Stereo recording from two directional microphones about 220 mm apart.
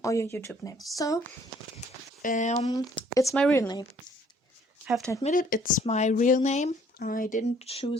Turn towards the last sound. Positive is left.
turn(degrees=25)  # may be behind; listen again after turning